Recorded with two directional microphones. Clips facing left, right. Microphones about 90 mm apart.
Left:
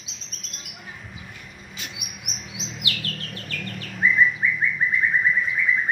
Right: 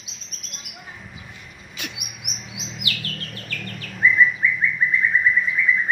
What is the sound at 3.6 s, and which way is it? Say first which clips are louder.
Bird: right 3 dB; centre (ahead or behind).